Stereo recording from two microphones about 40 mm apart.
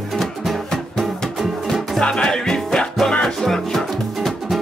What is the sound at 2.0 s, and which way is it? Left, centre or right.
Music, left.